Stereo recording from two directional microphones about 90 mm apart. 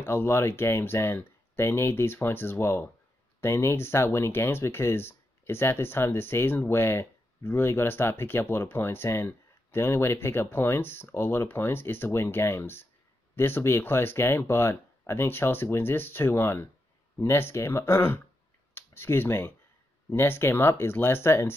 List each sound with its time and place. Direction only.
0.0 s speech: 25° left (ahead or behind)